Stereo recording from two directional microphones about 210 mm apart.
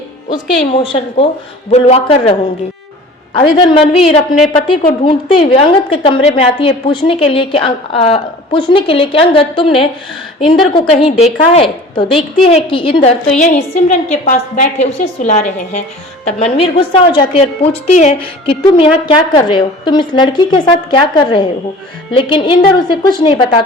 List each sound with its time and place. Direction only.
0.7 s a woman's voice: 25° left (ahead or behind)
3.3 s a woman's voice: 25° left (ahead or behind)